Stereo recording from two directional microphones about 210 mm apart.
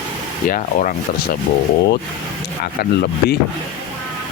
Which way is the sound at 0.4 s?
40° left (ahead or behind).